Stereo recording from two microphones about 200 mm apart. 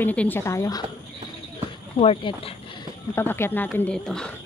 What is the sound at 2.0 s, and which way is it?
Speech, 30° left (ahead or behind).